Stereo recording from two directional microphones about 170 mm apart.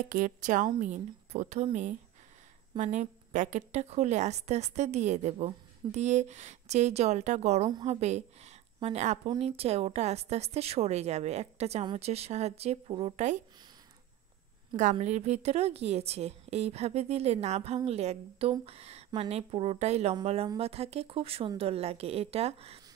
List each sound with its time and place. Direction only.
0.1 s a woman's voice: 50° right (ahead or behind)
14.8 s a woman's voice: 45° right (ahead or behind)